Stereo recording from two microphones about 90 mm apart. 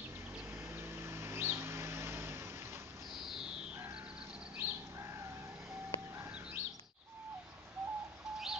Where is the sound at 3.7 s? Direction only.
15° right (ahead or behind).